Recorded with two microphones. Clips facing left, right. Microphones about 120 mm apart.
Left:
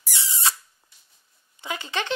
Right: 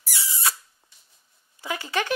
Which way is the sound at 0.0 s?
20° left (ahead or behind).